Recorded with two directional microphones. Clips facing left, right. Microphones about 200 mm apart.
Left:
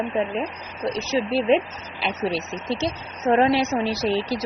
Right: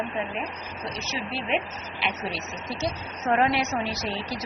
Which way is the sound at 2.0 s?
30° left (ahead or behind).